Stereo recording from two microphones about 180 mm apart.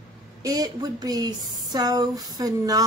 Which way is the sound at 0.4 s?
20° right (ahead or behind).